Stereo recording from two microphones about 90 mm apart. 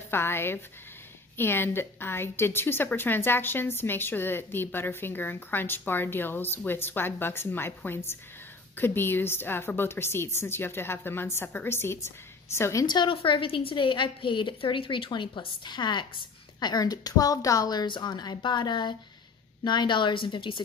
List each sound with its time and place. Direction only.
0.1 s a woman's voice: 25° left (ahead or behind)
12.8 s a woman's voice: 55° left (ahead or behind)
13.1 s a woman's voice: 85° left; by 20.6 s 70° left (ahead or behind)